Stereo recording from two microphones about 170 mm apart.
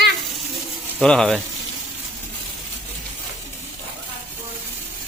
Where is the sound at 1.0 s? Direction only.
5° left (ahead or behind).